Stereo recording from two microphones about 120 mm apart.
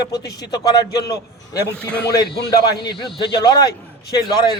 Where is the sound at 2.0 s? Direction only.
30° left (ahead or behind).